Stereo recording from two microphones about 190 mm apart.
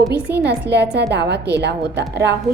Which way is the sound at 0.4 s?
60° right (ahead or behind).